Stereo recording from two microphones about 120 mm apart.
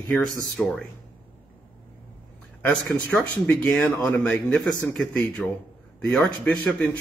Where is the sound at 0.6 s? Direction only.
5° left (ahead or behind).